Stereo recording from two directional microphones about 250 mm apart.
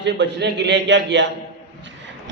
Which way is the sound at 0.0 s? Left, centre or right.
Right.